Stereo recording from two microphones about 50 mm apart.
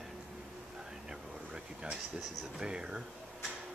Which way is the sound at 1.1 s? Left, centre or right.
Centre.